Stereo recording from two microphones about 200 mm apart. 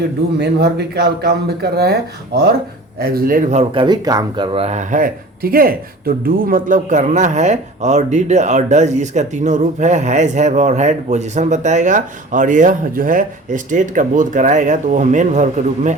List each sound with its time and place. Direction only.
0.3 s a man's voice: 55° right (ahead or behind)
3.6 s speech: 25° right (ahead or behind)